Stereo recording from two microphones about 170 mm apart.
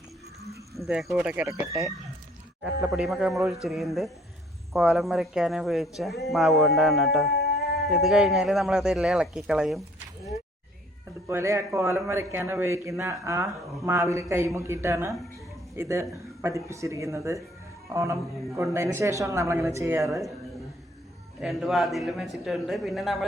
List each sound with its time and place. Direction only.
0.9 s speech: 5° right (ahead or behind)
1.5 s a man's voice: 20° right (ahead or behind)
2.8 s speech: centre (ahead or behind)
7.3 s a sound: 70° left (ahead or behind)
7.9 s speech: centre (ahead or behind)
11.3 s a man's voice: 15° right (ahead or behind)
20.1 s speech: centre (ahead or behind)
21.4 s speech: centre (ahead or behind)